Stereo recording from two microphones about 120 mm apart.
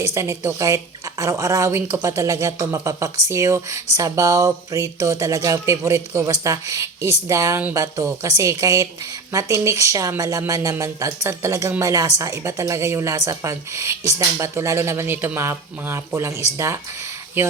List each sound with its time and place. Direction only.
0.0 s speech: 25° right (ahead or behind)